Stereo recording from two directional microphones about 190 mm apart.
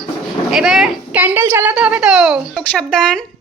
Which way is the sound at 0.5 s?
Centre (ahead or behind).